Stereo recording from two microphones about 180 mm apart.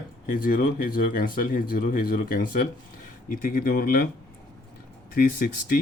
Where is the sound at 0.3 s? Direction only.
50° left (ahead or behind).